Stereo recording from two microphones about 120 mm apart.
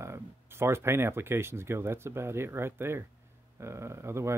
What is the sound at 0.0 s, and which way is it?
Speech, 20° right (ahead or behind).